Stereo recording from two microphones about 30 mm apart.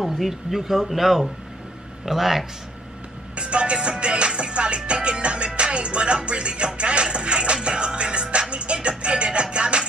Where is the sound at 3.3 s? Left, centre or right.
Right.